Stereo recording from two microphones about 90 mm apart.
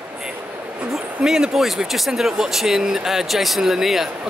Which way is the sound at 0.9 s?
5° right (ahead or behind).